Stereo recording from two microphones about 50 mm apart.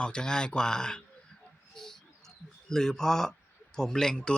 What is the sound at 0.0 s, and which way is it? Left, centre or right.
Speech, centre.